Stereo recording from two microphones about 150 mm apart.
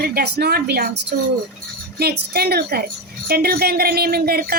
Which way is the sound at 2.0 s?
90° right.